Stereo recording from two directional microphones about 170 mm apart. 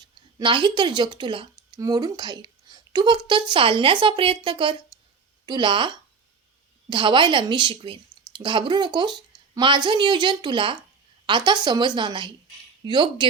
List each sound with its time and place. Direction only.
0.3 s a woman's voice: 30° right (ahead or behind)
6.9 s speech: 30° right (ahead or behind)